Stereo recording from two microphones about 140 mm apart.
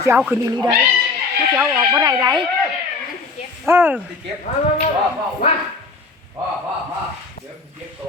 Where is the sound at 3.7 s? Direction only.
15° right (ahead or behind).